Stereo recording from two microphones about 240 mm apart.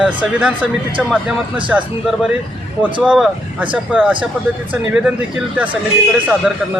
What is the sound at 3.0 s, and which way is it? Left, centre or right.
Speech, centre.